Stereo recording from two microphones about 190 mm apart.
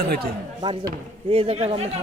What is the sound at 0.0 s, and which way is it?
Speech, 55° right (ahead or behind).